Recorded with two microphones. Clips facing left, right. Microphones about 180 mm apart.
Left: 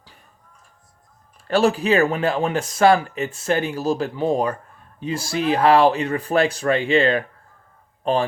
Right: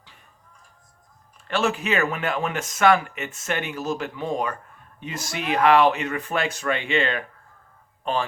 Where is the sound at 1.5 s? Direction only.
35° left (ahead or behind).